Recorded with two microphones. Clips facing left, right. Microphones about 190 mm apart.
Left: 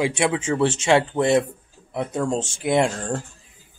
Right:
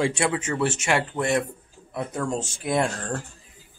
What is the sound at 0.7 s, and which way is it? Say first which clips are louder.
Speech: left 6 dB; 30° left (ahead or behind).